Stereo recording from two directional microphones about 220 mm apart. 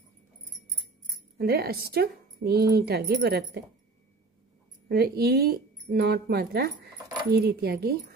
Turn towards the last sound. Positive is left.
turn(degrees=-45)  # may be behind; listen again after turning